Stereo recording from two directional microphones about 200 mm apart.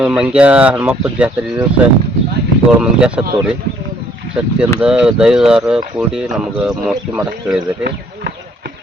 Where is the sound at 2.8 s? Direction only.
5° right (ahead or behind).